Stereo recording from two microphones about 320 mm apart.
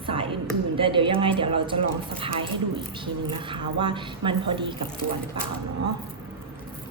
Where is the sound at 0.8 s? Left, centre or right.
Centre.